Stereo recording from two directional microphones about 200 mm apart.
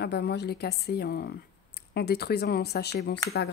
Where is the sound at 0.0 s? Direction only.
55° left (ahead or behind).